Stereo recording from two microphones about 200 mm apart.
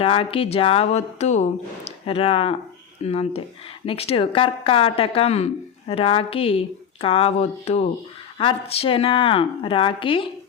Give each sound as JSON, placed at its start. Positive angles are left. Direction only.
{"t": 0.0, "sound": "speech", "side_deg": 25}